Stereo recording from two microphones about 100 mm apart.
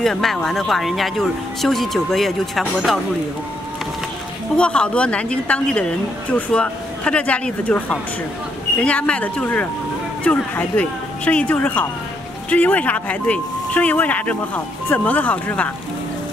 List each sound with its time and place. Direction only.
0.0 s speech: 5° left (ahead or behind)
4.6 s a woman's voice: 10° left (ahead or behind)